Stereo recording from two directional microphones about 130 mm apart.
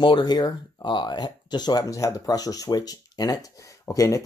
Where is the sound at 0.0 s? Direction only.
35° left (ahead or behind).